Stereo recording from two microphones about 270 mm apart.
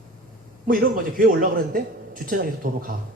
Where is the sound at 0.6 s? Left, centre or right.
Right.